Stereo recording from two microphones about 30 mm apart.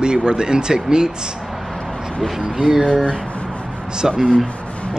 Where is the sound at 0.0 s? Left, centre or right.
Right.